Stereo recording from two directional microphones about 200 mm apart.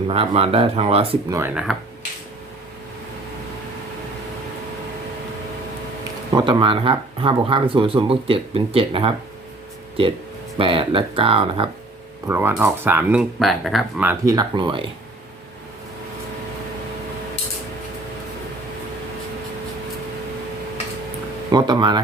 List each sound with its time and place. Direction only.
0.1 s speech: 30° right (ahead or behind)
1.3 s speech: 10° right (ahead or behind)
6.3 s speech: 25° right (ahead or behind)
10.6 s speech: 25° right (ahead or behind)
12.3 s speech: 10° right (ahead or behind)
14.3 s speech: 20° right (ahead or behind)
21.5 s speech: 20° right (ahead or behind)